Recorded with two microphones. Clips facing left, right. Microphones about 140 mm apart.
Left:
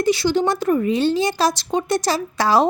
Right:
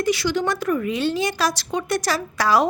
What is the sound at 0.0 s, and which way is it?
A woman's voice, 30° left (ahead or behind).